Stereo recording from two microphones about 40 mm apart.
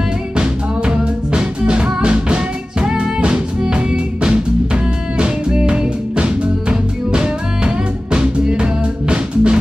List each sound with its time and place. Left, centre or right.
0.4 s music: right